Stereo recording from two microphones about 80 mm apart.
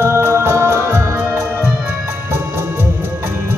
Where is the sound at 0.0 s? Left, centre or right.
Right.